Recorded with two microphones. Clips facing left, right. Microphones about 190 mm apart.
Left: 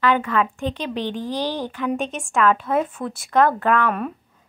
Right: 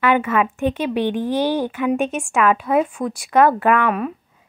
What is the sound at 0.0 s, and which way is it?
Speech, 15° right (ahead or behind).